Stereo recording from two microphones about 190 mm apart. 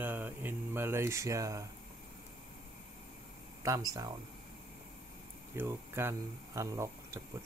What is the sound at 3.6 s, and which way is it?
Speech, 20° right (ahead or behind).